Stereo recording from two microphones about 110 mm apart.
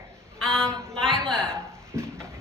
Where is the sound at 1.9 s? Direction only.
25° right (ahead or behind).